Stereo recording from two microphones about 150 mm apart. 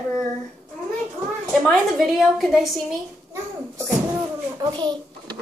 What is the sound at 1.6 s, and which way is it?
A woman's voice, 5° left (ahead or behind).